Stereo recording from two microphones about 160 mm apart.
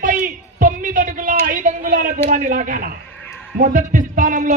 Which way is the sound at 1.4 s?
55° right (ahead or behind).